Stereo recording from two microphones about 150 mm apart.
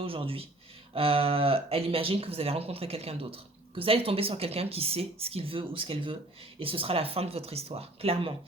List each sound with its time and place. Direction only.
0.0 s speech: 40° right (ahead or behind)